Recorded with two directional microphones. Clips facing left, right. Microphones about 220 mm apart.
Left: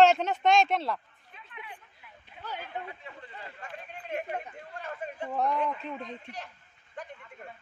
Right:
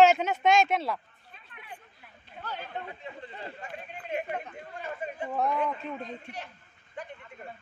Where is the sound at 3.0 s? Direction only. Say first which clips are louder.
Right 4 dB; 30° right (ahead or behind).